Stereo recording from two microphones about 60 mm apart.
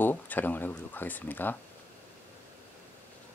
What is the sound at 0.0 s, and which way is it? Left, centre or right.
Speech, left.